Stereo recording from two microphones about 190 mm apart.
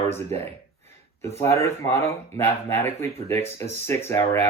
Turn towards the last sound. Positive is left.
turn(degrees=15)  # may be behind; listen again after turning